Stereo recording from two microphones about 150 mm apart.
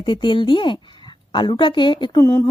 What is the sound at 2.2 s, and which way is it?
Speech, 15° left (ahead or behind).